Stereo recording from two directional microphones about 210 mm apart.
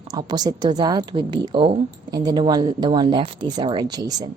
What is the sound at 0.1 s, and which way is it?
A woman's voice, 20° right (ahead or behind).